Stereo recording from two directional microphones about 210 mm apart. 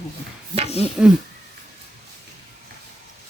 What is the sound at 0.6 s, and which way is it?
Speech, 30° left (ahead or behind).